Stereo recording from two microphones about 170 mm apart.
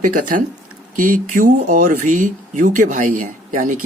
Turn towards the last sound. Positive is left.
turn(degrees=-50)  # may be behind; listen again after turning